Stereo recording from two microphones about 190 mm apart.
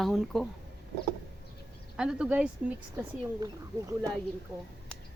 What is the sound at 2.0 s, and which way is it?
Speech, 5° right (ahead or behind).